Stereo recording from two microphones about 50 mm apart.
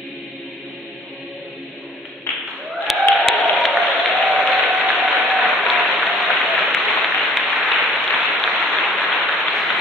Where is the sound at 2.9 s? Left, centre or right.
Centre.